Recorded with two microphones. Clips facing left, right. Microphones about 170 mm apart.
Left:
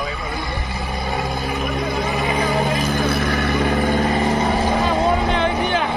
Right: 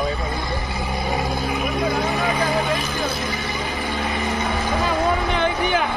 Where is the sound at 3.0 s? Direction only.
60° left (ahead or behind); by 4.7 s 35° left (ahead or behind).